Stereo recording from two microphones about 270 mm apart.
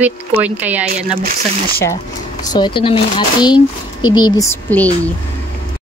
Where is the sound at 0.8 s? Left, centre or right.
Right.